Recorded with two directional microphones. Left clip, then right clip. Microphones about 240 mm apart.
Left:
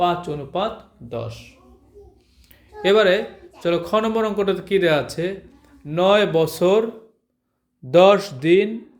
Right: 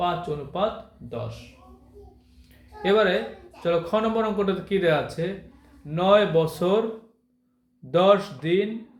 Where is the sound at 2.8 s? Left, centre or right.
Left.